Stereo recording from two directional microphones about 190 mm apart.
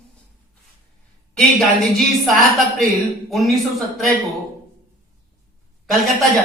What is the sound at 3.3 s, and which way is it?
Speech, centre (ahead or behind).